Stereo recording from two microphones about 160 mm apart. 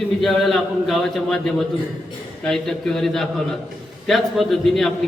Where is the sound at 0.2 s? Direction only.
Centre (ahead or behind).